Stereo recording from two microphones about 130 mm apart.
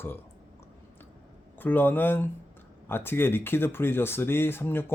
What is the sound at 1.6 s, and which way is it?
Speech, 15° left (ahead or behind).